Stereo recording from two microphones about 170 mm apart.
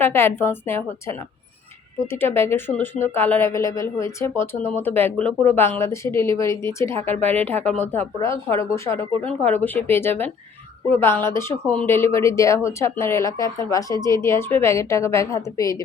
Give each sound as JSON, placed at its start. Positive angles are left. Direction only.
{"t": 0.0, "sound": "a woman's voice", "side_deg": 15}